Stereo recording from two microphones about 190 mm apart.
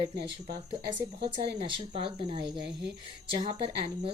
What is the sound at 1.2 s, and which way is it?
Speech, 30° right (ahead or behind).